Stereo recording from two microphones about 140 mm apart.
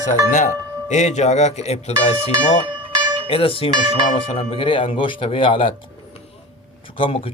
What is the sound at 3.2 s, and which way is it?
Speech, 40° left (ahead or behind).